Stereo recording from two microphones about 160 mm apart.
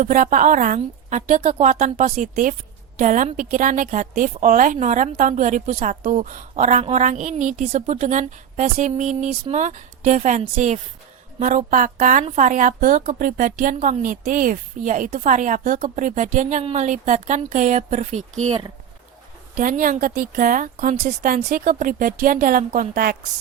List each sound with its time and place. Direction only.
0.0 s a woman's voice: 55° right (ahead or behind)
19.5 s a woman's voice: 55° right (ahead or behind)